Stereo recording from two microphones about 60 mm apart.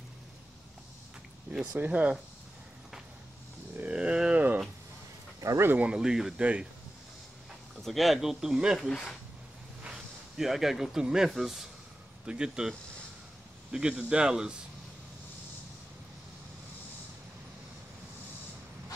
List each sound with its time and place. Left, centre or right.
1.7 s speech: right
3.9 s a sound: centre
5.4 s speech: right
5.8 s speech: centre
7.8 s speech: centre
8.7 s speech: centre
9.8 s speech: centre